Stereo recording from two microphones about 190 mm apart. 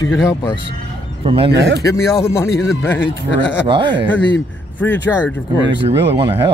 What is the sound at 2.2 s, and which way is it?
Speech, 15° left (ahead or behind).